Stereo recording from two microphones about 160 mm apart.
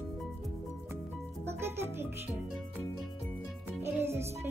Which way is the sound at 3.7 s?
15° right (ahead or behind).